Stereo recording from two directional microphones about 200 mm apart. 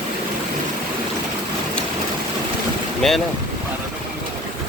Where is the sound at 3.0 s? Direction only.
Centre (ahead or behind).